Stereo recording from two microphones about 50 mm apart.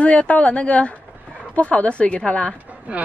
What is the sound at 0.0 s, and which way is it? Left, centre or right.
A woman's voice, left.